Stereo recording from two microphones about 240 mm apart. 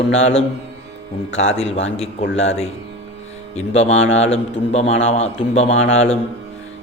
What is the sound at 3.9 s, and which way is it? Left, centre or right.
Mantra, left.